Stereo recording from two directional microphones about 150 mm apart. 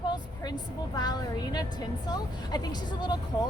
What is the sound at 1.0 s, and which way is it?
Music, 25° left (ahead or behind).